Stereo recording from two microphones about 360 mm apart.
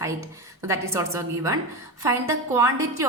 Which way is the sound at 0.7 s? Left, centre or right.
Centre.